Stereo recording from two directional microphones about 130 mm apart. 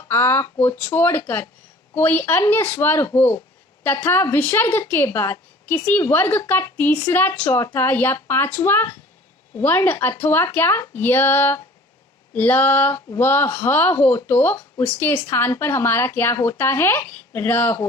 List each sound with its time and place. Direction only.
0.1 s a woman's voice: 15° left (ahead or behind)